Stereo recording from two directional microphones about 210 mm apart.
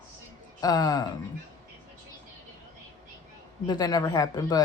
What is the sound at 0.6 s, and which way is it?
Speech, 20° left (ahead or behind).